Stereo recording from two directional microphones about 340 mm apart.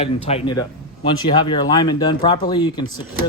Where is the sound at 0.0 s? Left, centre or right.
Centre.